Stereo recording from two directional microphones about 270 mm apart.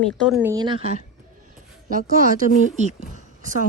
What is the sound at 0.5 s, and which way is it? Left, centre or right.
Speech, centre.